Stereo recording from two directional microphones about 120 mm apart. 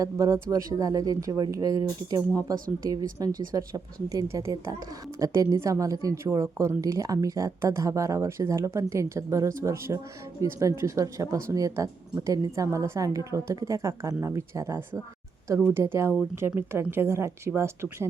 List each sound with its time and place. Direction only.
0.0 s speech: 25° right (ahead or behind)